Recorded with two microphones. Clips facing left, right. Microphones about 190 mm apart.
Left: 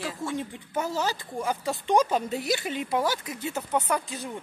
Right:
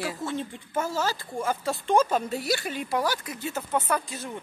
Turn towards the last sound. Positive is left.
turn(degrees=15)  # may be behind; listen again after turning